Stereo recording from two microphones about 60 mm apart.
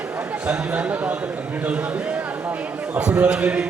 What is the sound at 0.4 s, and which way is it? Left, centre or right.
A man's voice, right.